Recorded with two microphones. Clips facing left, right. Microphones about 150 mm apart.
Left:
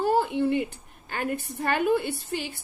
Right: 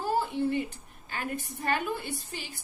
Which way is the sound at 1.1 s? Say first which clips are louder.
Left 5 dB; 55° left (ahead or behind).